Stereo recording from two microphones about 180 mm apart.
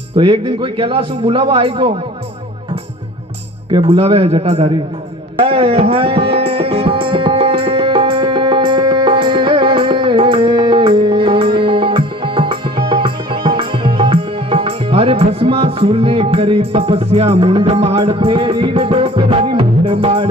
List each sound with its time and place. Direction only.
0.1 s a man's voice: 30° right (ahead or behind)
3.7 s a man's voice: 30° right (ahead or behind)
5.4 s music: 30° right (ahead or behind)